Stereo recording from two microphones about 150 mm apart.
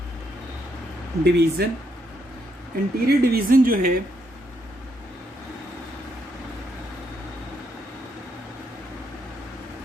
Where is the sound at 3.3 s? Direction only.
75° right (ahead or behind).